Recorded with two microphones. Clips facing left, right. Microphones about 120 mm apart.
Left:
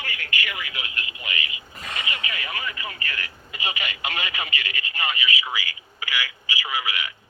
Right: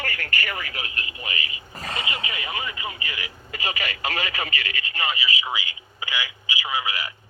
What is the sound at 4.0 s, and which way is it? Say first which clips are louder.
Speech: right 2 dB; 35° right (ahead or behind).